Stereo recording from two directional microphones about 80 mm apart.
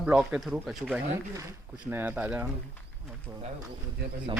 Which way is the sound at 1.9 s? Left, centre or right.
Right.